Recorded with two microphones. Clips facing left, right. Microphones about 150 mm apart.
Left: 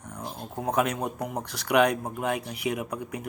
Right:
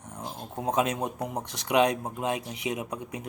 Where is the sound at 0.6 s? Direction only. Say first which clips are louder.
Even; 20° right (ahead or behind).